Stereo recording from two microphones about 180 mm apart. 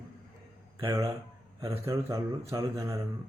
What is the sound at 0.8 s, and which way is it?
Speech, 20° right (ahead or behind).